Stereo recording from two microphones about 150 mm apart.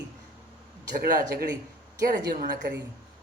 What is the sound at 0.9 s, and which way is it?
Speech, 75° right (ahead or behind).